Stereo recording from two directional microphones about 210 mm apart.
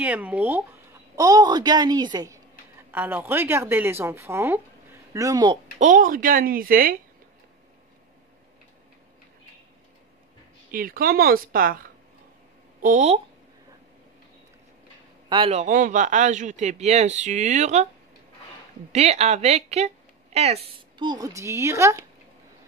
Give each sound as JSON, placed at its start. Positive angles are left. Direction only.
{"t": 0.0, "sound": "a child's voice", "side_deg": -5}
{"t": 5.8, "sound": "a man's voice", "side_deg": -35}
{"t": 10.7, "sound": "speech", "side_deg": -45}
{"t": 12.8, "sound": "a man's voice", "side_deg": -35}
{"t": 15.2, "sound": "a man's voice", "side_deg": -25}
{"t": 18.9, "sound": "a man's voice", "side_deg": -30}
{"t": 21.0, "sound": "speech", "side_deg": -20}